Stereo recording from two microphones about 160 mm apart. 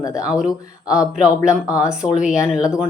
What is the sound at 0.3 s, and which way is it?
Speech, 5° right (ahead or behind).